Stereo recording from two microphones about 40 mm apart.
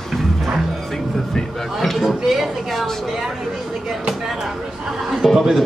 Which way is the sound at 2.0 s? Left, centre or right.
Centre.